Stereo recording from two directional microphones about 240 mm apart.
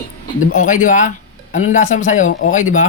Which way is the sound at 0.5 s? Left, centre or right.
Left.